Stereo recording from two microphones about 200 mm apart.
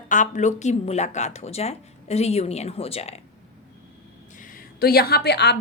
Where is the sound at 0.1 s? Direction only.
40° left (ahead or behind).